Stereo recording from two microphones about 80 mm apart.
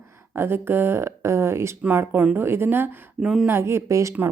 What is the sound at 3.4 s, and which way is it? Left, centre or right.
Speech, right.